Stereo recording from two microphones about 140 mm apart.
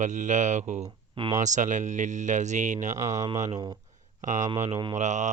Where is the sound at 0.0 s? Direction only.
60° right (ahead or behind).